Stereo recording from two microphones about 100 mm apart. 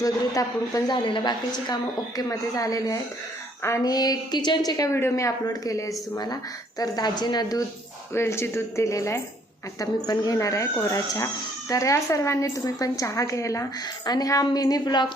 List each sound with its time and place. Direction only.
0.0 s a woman's voice: 35° left (ahead or behind)
0.9 s a woman's voice: 55° left (ahead or behind)
4.9 s a woman's voice: 25° left (ahead or behind)
8.1 s a woman's voice: 25° left (ahead or behind); by 15.0 s 40° left (ahead or behind)